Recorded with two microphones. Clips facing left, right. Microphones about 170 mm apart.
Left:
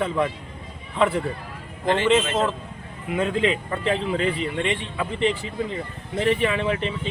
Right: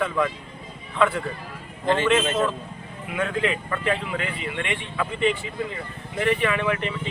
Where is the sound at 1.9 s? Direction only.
30° left (ahead or behind).